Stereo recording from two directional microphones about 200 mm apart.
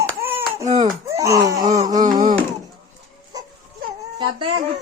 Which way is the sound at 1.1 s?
15° right (ahead or behind).